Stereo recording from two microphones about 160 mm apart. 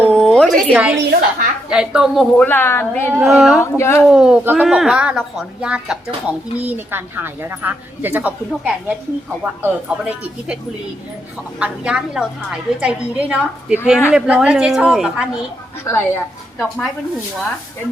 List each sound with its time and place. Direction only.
0.0 s a sound: 5° left (ahead or behind)
0.7 s a woman's voice: 10° right (ahead or behind)
2.4 s speech: 15° left (ahead or behind)
3.2 s speech: 5° right (ahead or behind)
3.6 s speech: 15° left (ahead or behind)
4.1 s a woman's voice: 5° right (ahead or behind)
11.6 s a woman's voice: 5° right (ahead or behind)
15.8 s speech: 15° left (ahead or behind)
16.6 s speech: centre (ahead or behind)